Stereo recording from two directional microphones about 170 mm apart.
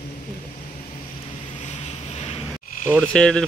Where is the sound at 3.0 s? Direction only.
5° left (ahead or behind).